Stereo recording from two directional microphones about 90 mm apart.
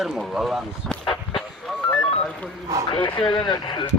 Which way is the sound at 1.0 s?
75° left (ahead or behind).